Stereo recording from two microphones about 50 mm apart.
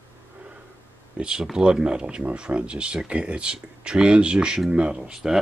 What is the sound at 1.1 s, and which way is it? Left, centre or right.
Speech, centre.